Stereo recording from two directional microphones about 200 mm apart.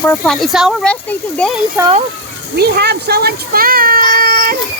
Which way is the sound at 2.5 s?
55° right (ahead or behind).